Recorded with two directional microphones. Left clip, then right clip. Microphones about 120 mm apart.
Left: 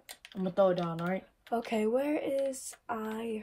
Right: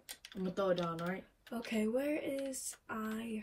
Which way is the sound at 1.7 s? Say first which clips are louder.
Left 4 dB; 45° left (ahead or behind).